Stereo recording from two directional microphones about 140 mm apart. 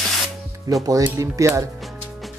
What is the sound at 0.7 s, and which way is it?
Speech, 25° right (ahead or behind).